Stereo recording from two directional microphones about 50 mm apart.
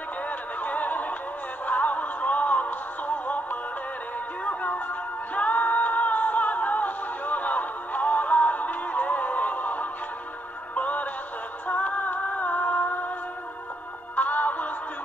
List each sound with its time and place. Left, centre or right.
0.3 s a sound: left
1.7 s music: left
4.5 s music: left
14.1 s music: left